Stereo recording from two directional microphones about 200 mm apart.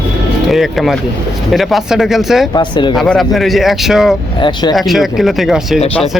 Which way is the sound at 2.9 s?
Centre (ahead or behind).